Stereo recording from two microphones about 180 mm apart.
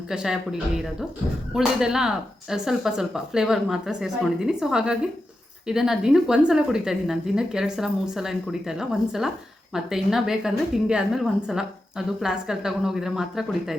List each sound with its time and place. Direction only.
0.1 s speech: 5° right (ahead or behind)